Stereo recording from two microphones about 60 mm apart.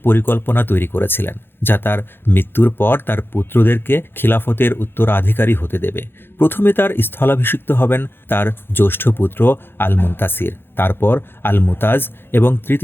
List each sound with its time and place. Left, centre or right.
0.0 s speech: left